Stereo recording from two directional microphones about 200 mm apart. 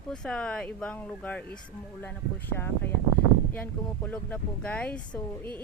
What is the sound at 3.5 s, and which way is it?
Speech, 5° left (ahead or behind).